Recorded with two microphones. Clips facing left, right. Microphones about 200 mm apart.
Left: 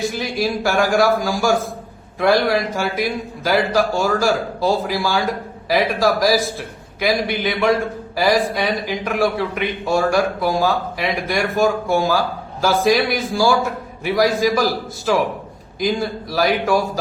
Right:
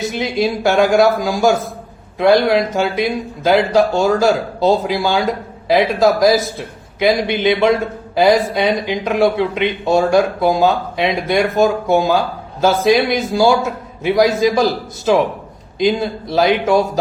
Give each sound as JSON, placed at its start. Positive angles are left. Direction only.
{"t": 0.0, "sound": "a man's voice", "side_deg": -20}